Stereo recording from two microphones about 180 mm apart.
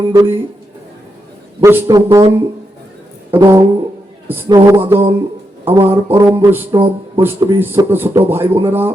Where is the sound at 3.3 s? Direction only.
15° right (ahead or behind).